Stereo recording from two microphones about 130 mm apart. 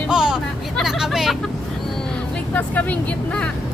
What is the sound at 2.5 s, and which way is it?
Speech, 10° left (ahead or behind).